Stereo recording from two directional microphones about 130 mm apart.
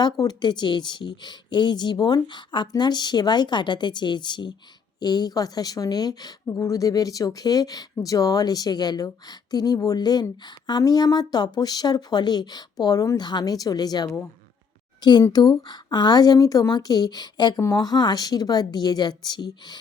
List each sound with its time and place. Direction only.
0.0 s a woman's voice: 30° left (ahead or behind)
15.3 s speech: 30° left (ahead or behind)